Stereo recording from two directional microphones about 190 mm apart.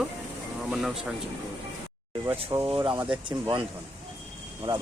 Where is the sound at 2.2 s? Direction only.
15° right (ahead or behind).